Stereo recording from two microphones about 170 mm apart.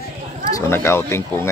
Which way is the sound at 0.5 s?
15° left (ahead or behind).